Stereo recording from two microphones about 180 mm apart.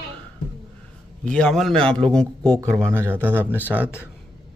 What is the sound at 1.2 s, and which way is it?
Speech, 5° left (ahead or behind).